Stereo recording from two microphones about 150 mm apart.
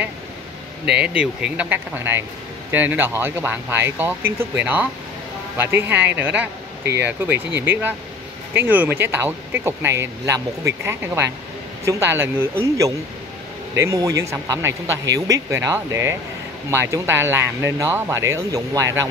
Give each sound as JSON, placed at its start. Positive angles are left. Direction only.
{"t": 0.9, "sound": "speech", "side_deg": -5}